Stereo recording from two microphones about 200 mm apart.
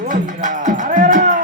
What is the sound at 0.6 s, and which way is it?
Music, 40° right (ahead or behind).